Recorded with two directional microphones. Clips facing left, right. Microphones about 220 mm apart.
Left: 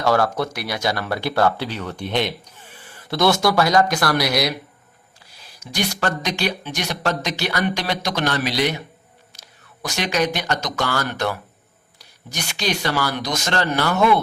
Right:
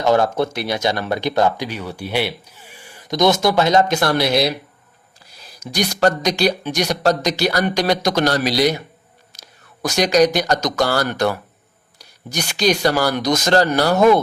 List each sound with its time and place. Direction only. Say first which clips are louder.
0.0 s speech: right 3 dB; 20° right (ahead or behind)
5.7 s speech: right 6 dB; 40° right (ahead or behind)
9.8 s speech: right 7 dB; 40° right (ahead or behind)